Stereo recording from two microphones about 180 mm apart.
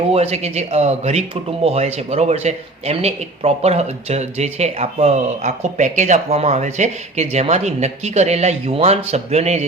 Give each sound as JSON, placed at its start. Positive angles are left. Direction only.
{"t": 0.1, "sound": "speech", "side_deg": -35}